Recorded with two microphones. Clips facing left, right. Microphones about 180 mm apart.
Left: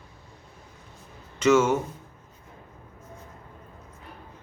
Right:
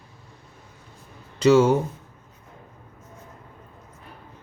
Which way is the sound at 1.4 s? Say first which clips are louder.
Right 4 dB; 35° right (ahead or behind).